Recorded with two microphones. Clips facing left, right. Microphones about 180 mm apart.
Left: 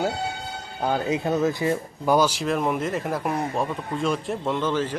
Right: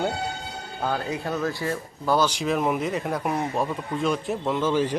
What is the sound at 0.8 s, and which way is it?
Speech, 20° left (ahead or behind).